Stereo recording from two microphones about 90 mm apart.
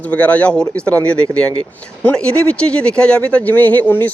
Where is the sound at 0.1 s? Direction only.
15° left (ahead or behind).